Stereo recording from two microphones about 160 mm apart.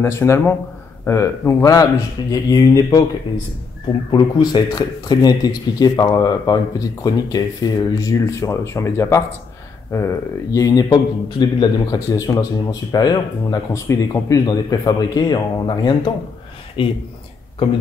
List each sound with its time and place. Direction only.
0.0 s speech: 15° left (ahead or behind)
4.1 s speech: 25° left (ahead or behind)